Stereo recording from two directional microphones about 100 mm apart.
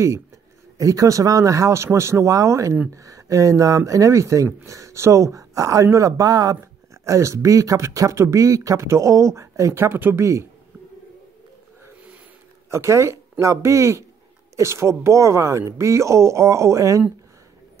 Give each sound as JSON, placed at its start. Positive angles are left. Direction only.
{"t": 0.7, "sound": "speech", "side_deg": -35}
{"t": 12.6, "sound": "speech", "side_deg": -30}